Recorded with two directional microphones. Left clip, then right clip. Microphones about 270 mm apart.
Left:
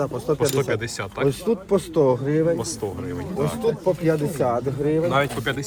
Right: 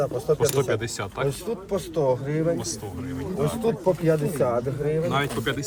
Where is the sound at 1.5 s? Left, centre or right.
Left.